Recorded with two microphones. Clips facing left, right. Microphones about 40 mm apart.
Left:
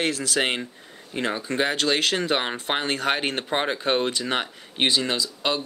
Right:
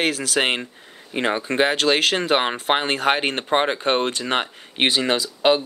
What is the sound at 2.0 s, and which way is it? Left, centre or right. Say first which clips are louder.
Speech: right 4 dB; centre.